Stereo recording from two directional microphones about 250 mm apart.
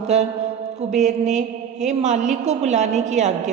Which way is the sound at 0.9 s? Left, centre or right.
Right.